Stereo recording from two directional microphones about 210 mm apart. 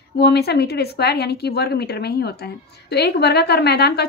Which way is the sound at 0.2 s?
50° left (ahead or behind).